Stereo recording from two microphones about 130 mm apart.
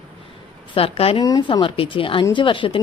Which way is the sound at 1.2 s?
30° left (ahead or behind).